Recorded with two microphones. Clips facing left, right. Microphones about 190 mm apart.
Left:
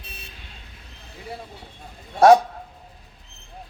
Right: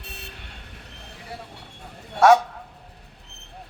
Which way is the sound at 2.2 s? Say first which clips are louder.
Left 3 dB; 35° left (ahead or behind).